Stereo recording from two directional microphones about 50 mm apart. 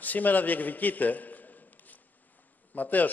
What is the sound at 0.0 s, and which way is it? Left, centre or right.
A man's voice, left.